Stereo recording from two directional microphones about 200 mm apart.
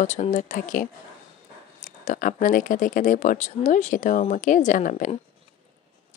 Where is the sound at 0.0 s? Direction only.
35° left (ahead or behind).